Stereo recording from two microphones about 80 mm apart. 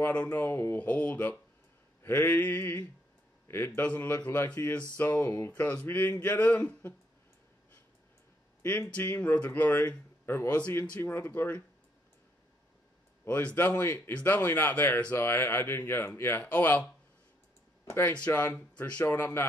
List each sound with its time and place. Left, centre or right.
0.0 s speech: left
3.8 s a man's voice: centre
4.6 s music: left
4.9 s speech: left
5.5 s speech: centre
8.9 s speech: left
13.2 s speech: centre
18.3 s music: left
18.8 s speech: left